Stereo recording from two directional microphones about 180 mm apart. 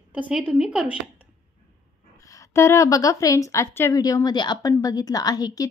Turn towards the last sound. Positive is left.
turn(degrees=20)  # may be behind; listen again after turning